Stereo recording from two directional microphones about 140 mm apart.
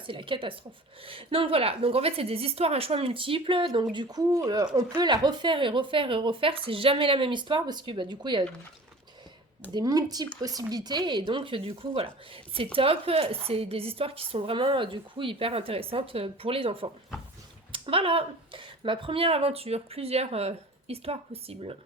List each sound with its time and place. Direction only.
0.1 s a woman's voice: 35° right (ahead or behind)
9.7 s a woman's voice: 25° right (ahead or behind); by 21.8 s 45° right (ahead or behind)